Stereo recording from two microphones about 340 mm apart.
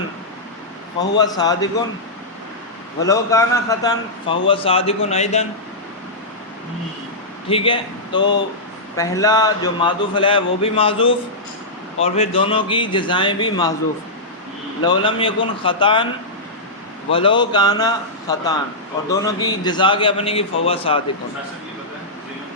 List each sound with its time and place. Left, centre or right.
0.9 s a man's voice: centre
3.1 s a man's voice: centre
7.4 s a man's voice: centre
14.8 s a man's voice: centre
17.1 s a man's voice: centre